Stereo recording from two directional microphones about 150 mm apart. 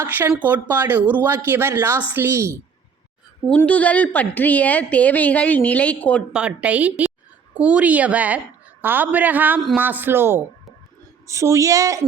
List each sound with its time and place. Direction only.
0.0 s a woman's voice: 15° right (ahead or behind)
3.4 s a woman's voice: 10° left (ahead or behind)
6.3 s a woman's voice: 10° right (ahead or behind)